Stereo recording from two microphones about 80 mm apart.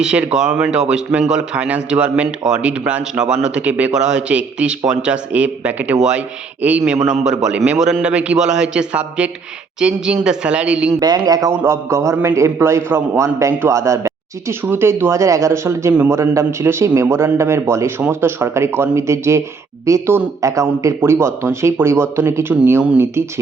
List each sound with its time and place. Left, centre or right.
0.0 s speech: centre
11.0 s a man's voice: right
11.6 s a man's voice: right
14.6 s a man's voice: right